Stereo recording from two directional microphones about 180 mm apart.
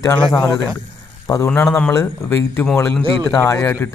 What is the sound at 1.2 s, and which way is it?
A man's voice, 15° left (ahead or behind).